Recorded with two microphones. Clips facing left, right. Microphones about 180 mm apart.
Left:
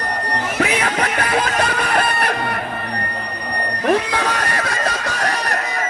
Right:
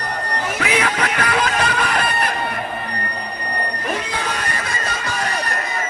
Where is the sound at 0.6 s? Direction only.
35° left (ahead or behind).